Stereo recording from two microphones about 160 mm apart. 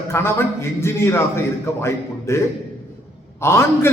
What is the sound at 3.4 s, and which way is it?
Speech, 15° left (ahead or behind).